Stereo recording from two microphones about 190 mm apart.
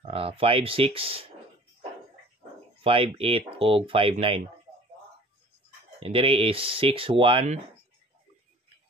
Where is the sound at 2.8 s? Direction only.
30° right (ahead or behind).